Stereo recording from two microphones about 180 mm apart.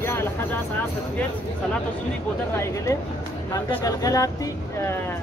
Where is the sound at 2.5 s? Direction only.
15° left (ahead or behind).